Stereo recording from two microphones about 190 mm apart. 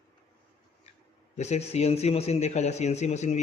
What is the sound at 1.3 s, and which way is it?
A man's voice, 35° left (ahead or behind).